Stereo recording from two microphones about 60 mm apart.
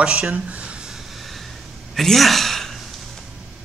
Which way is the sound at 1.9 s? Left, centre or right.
Centre.